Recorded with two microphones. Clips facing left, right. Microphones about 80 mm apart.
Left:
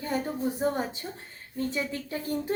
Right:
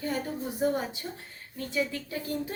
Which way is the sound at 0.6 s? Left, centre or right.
Left.